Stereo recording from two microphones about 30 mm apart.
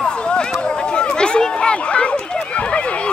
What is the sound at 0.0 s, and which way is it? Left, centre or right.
Clip-clop, left.